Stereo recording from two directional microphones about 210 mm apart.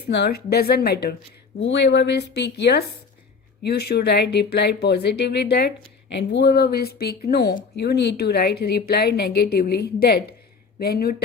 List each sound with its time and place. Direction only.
0.1 s speech: 50° left (ahead or behind)
1.5 s speech: 60° left (ahead or behind)